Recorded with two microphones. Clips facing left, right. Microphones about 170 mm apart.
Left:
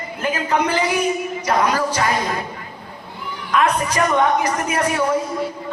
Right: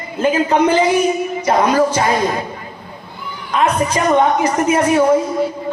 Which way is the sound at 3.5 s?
25° right (ahead or behind).